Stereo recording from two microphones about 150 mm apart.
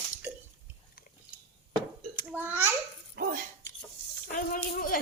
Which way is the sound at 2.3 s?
10° right (ahead or behind).